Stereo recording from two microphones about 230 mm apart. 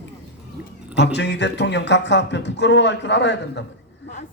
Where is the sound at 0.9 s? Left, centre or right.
Left.